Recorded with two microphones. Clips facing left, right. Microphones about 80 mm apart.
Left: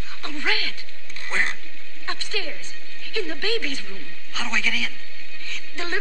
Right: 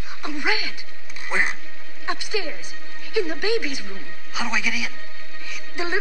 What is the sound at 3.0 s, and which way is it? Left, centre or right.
A woman's voice, centre.